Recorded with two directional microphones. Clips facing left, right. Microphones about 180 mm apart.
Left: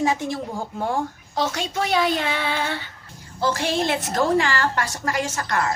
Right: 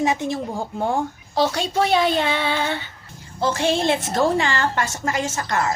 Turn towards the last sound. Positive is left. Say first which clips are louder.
# right 1 dB
turn(degrees=-25)  # may be behind; listen again after turning